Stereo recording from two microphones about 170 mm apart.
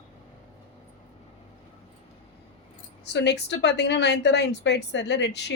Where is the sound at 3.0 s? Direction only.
90° left.